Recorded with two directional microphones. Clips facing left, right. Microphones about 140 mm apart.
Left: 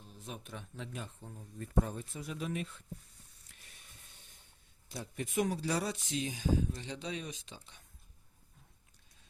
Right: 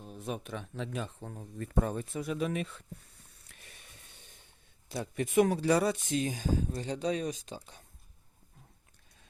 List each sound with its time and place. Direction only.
0.0 s speech: 60° right (ahead or behind); by 2.8 s 85° right
3.5 s a sound: 65° right (ahead or behind)
4.9 s speech: 70° right (ahead or behind); by 7.9 s 40° right (ahead or behind)